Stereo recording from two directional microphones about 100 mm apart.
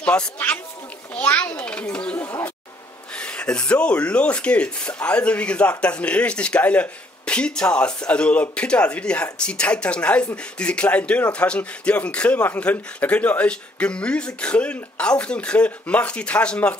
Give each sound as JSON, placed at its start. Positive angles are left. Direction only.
{"t": 0.0, "sound": "speech", "side_deg": 10}
{"t": 2.1, "sound": "a sound", "side_deg": 30}
{"t": 3.2, "sound": "speech", "side_deg": 10}